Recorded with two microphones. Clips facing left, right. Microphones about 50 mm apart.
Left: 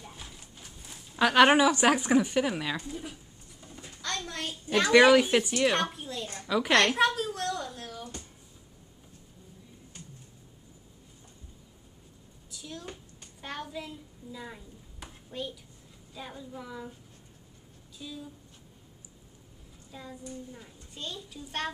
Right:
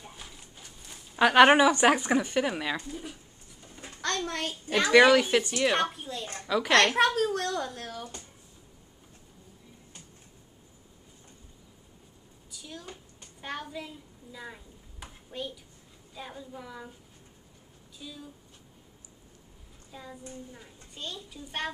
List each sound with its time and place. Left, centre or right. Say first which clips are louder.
0.0 s horse: even; centre
1.1 s a woman's voice: right 2 dB; centre
1.7 s a child's voice: right 1 dB; centre
3.8 s a sound: right 4 dB; right
4.3 s speech: right 3 dB; right
4.7 s a child's voice: even; centre
7.2 s speech: right 4 dB; right
12.4 s a sound: left 2 dB; centre
16.2 s a child's voice: even; centre
17.9 s speech: left 2 dB; centre
19.9 s a child's voice: left 1 dB; centre